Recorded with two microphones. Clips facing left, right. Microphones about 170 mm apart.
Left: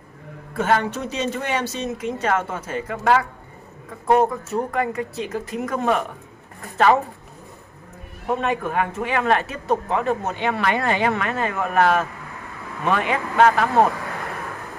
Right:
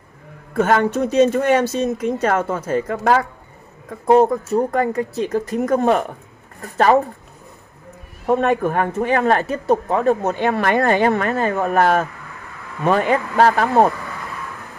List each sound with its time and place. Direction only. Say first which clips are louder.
0.6 s speech: right 5 dB; 45° right (ahead or behind)
8.3 s speech: right 6 dB; 45° right (ahead or behind)